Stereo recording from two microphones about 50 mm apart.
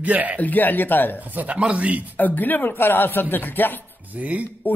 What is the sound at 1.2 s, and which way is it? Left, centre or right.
Speech, right.